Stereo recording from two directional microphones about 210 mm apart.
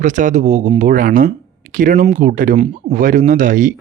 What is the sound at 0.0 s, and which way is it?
Speech, 35° right (ahead or behind).